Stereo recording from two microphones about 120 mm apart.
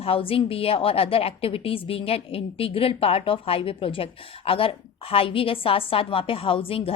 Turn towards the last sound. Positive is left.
turn(degrees=50)  # may be behind; listen again after turning